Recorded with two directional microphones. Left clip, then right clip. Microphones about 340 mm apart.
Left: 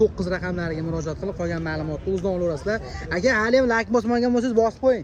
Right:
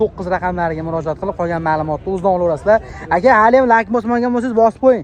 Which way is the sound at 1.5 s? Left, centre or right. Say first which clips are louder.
Right 11 dB; right.